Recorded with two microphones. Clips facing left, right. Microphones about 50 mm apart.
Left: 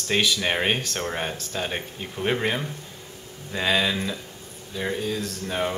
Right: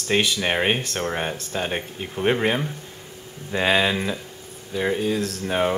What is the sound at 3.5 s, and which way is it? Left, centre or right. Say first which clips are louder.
Speech: right 3 dB; right.